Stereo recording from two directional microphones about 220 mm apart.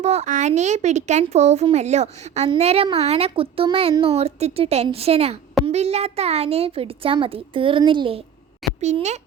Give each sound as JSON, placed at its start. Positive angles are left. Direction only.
{"t": 0.0, "sound": "a child's voice", "side_deg": -30}